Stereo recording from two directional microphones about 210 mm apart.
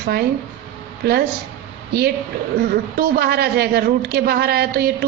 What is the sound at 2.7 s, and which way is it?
A man's voice, 50° right (ahead or behind).